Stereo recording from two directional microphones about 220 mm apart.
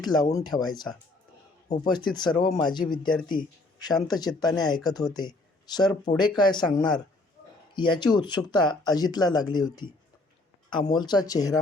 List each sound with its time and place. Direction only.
0.0 s speech: 20° left (ahead or behind)
1.6 s a man's voice: 30° left (ahead or behind)
1.9 s speech: 20° left (ahead or behind)